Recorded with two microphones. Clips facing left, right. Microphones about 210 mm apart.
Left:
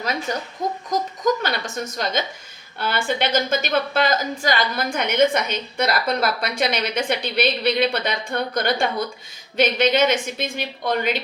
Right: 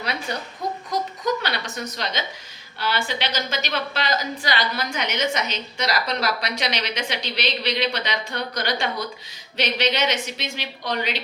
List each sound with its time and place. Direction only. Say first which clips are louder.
0.0 s a woman's voice: left 3 dB; 45° left (ahead or behind)